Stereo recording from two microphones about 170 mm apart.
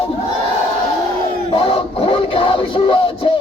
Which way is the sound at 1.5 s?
35° left (ahead or behind).